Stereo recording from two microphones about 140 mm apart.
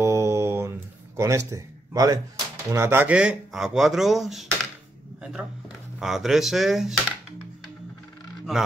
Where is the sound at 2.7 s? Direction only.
15° right (ahead or behind); by 7.0 s centre (ahead or behind).